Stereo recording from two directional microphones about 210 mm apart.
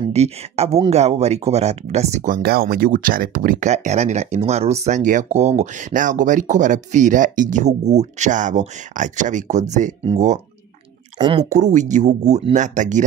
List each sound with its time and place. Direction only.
0.1 s speech: 30° right (ahead or behind)
11.1 s speech: 25° right (ahead or behind)
11.4 s speech: 35° right (ahead or behind)